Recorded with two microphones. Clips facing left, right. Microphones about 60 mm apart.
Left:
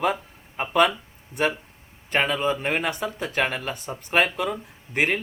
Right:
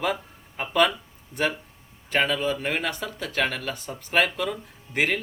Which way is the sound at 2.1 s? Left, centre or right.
Centre.